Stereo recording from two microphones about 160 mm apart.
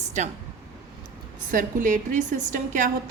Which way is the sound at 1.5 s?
55° right (ahead or behind).